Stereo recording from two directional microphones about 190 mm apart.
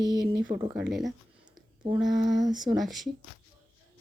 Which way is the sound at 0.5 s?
30° right (ahead or behind).